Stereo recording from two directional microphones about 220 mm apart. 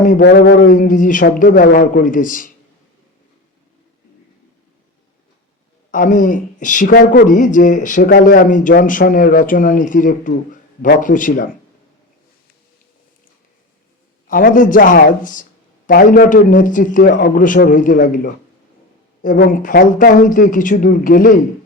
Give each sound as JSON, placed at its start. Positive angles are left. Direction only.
{"t": 0.2, "sound": "speech", "side_deg": 45}
{"t": 5.9, "sound": "speech", "side_deg": 35}
{"t": 14.3, "sound": "speech", "side_deg": 40}